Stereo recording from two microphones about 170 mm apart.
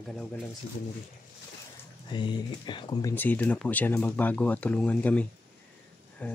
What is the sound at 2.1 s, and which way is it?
Speech, 30° left (ahead or behind).